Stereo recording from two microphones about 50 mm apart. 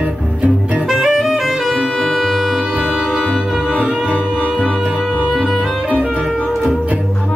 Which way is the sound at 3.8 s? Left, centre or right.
Right.